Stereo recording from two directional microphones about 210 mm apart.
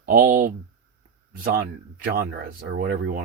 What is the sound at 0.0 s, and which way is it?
Speech, 40° right (ahead or behind).